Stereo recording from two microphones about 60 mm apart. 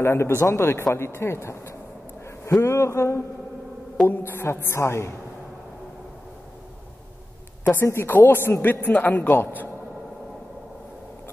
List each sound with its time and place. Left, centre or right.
0.0 s a woman's voice: left
2.6 s a woman's voice: left
4.1 s a woman's voice: left
7.8 s a woman's voice: left
8.1 s a man's voice: left